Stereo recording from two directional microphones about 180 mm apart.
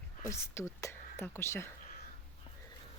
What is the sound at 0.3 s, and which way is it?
Speech, 15° left (ahead or behind).